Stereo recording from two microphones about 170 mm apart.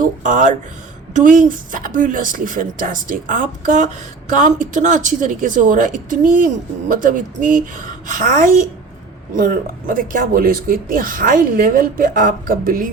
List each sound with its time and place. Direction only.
0.0 s a woman's voice: 50° right (ahead or behind)